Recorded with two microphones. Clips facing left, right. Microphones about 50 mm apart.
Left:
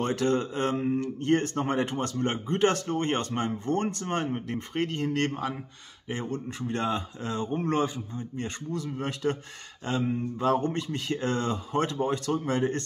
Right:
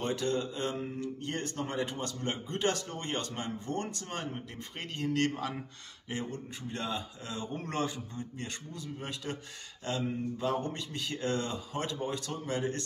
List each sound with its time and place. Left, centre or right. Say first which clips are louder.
0.0 s speech: left 6 dB; left
6.2 s speech: left 7 dB; left
7.5 s speech: left 10 dB; left
8.7 s speech: left 11 dB; left
9.8 s speech: left 5 dB; left
10.4 s speech: left 8 dB; left